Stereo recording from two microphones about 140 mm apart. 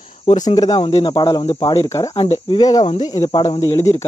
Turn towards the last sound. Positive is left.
turn(degrees=20)  # may be behind; listen again after turning